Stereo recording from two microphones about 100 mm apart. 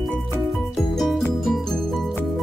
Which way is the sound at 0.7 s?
Centre (ahead or behind).